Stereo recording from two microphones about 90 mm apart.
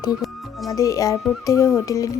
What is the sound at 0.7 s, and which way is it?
Speech, 40° left (ahead or behind).